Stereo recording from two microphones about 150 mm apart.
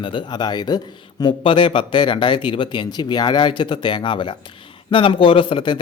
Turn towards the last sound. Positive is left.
turn(degrees=30)  # may be behind; listen again after turning